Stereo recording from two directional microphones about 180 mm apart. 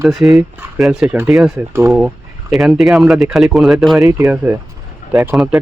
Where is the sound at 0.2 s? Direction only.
5° right (ahead or behind).